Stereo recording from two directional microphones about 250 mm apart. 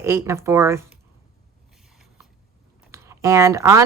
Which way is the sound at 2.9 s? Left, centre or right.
Centre.